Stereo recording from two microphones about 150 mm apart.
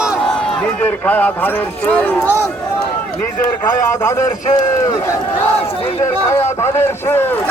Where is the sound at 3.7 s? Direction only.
20° left (ahead or behind).